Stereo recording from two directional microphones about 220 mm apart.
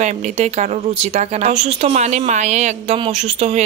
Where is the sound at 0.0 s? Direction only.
30° right (ahead or behind).